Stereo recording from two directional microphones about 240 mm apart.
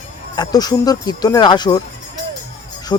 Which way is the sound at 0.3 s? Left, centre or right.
Centre.